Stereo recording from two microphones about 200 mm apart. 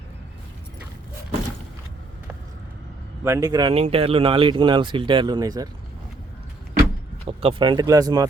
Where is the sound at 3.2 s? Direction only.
15° right (ahead or behind).